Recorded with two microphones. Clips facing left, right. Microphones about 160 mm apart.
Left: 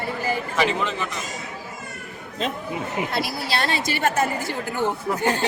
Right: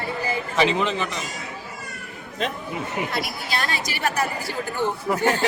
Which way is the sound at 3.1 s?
30° left (ahead or behind).